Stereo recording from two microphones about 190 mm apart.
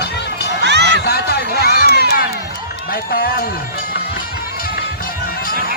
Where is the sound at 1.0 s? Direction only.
55° left (ahead or behind).